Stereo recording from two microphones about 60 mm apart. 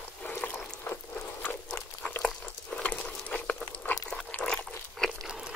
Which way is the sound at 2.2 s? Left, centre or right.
Centre.